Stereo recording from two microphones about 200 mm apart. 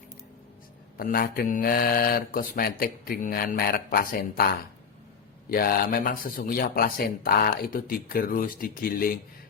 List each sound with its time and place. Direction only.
0.9 s speech: 45° left (ahead or behind)
5.5 s speech: 45° left (ahead or behind)